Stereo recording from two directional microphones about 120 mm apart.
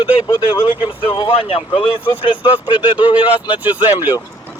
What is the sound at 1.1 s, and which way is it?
Speech, 45° left (ahead or behind).